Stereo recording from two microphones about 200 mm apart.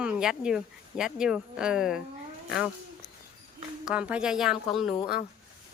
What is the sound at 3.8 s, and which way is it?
Speech, 5° right (ahead or behind).